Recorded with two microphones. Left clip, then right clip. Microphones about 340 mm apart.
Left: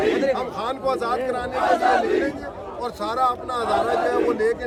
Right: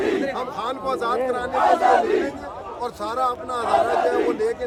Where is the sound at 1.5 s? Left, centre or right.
Right.